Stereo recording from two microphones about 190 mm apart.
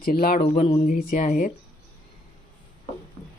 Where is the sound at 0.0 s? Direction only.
50° left (ahead or behind).